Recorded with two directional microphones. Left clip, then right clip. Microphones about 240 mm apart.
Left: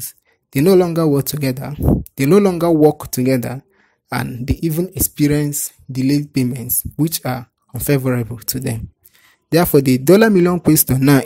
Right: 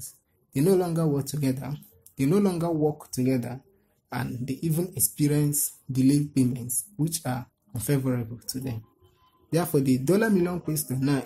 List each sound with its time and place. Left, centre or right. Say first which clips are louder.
0.5 s speech: left 11 dB; left